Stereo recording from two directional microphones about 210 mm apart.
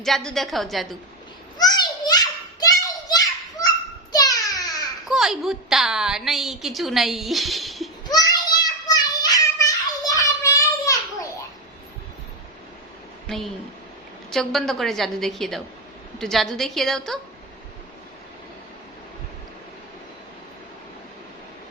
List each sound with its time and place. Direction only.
0.0 s a woman's voice: centre (ahead or behind)
1.5 s children playing: 20° left (ahead or behind)
4.1 s a sound: 15° left (ahead or behind)
5.0 s a woman's voice: centre (ahead or behind)
8.0 s child singing: 15° left (ahead or behind)
13.2 s a man's voice: centre (ahead or behind)